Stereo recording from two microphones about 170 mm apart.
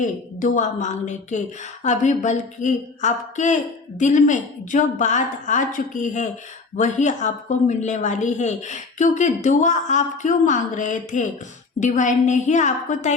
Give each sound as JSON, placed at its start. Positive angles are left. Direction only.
{"t": 0.0, "sound": "a woman's voice", "side_deg": 50}